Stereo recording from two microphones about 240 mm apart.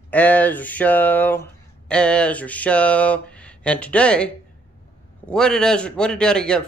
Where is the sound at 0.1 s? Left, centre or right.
Centre.